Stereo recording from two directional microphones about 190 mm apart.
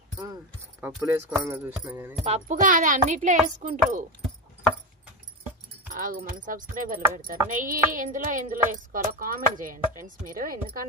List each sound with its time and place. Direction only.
0.9 s speech: 10° right (ahead or behind)
2.2 s a child's voice: 35° right (ahead or behind)
5.9 s speech: 45° right (ahead or behind)